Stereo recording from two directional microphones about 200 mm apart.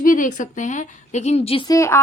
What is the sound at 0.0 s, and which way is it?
A woman's voice, 40° left (ahead or behind).